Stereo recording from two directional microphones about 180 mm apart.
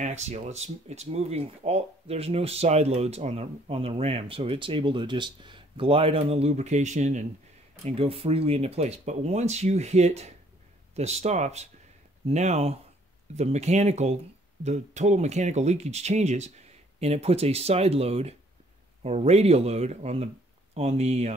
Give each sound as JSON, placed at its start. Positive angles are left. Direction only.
{"t": 0.0, "sound": "speech", "side_deg": -40}